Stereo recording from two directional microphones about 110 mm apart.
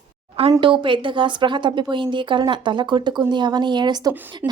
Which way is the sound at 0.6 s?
50° right (ahead or behind).